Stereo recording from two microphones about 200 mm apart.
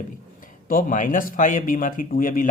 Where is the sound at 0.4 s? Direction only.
45° left (ahead or behind).